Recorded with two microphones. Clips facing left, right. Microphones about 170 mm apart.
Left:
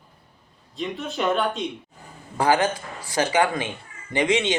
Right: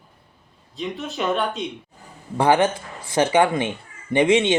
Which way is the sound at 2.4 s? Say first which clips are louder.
Right 3 dB; 25° right (ahead or behind).